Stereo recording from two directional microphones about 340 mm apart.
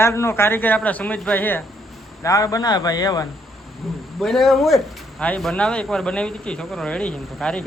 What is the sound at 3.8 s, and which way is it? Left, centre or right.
Speech, centre.